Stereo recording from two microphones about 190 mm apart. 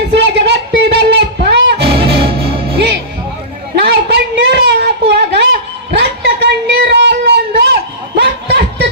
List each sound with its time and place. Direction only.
0.1 s music: 65° right (ahead or behind)
2.2 s music: 30° right (ahead or behind)
3.8 s a sound: 60° right (ahead or behind)